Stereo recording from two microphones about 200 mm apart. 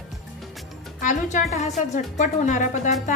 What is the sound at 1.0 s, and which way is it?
A woman's voice, 40° left (ahead or behind).